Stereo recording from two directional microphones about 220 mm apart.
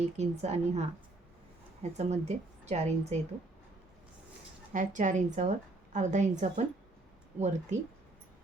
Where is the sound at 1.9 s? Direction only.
30° right (ahead or behind).